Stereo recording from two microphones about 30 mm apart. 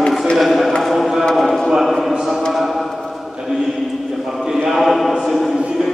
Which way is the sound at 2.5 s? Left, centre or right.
Centre.